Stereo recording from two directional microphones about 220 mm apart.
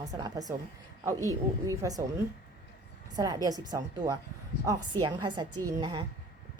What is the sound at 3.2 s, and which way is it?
A woman's voice, 15° right (ahead or behind).